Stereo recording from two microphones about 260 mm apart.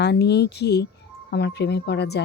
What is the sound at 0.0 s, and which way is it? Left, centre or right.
A woman's voice, left.